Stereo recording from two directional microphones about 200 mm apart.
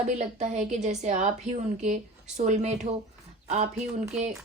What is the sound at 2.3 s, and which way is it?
Speech, 35° right (ahead or behind).